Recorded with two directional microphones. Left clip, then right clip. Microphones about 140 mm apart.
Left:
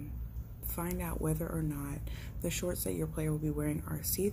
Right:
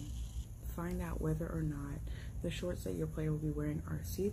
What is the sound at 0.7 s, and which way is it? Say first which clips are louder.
Speech: left 4 dB; 10° left (ahead or behind).